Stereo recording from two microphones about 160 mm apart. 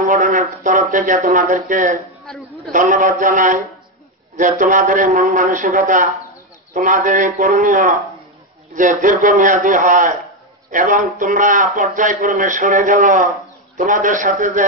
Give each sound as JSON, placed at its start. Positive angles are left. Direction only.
{"t": 0.0, "sound": "speech", "side_deg": -55}